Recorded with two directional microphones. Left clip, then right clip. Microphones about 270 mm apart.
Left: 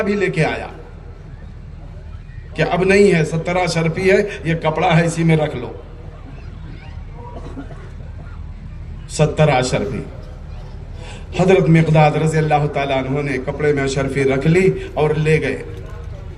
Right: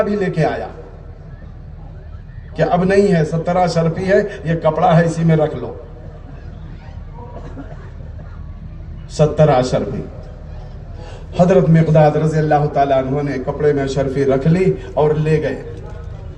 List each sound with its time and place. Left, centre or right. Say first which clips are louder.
0.0 s a man's voice: right 1 dB; centre
2.6 s a man's voice: even; centre
9.1 s a man's voice: right 3 dB; centre
11.3 s a man's voice: right 1 dB; centre